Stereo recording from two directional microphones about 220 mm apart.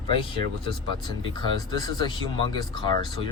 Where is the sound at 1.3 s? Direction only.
20° left (ahead or behind).